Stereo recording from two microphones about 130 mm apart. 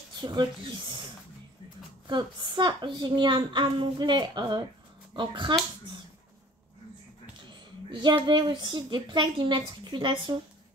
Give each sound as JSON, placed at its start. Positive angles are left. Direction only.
{"t": 0.2, "sound": "speech", "side_deg": -35}
{"t": 2.0, "sound": "a woman's voice", "side_deg": -35}
{"t": 7.9, "sound": "a woman's voice", "side_deg": -35}